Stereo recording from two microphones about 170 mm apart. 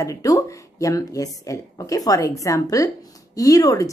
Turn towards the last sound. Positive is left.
turn(degrees=20)  # may be behind; listen again after turning